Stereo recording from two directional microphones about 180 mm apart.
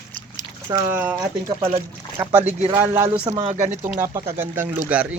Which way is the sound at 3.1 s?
30° right (ahead or behind).